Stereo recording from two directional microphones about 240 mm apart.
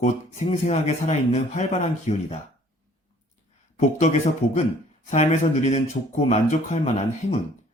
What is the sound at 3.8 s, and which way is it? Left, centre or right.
Speech, left.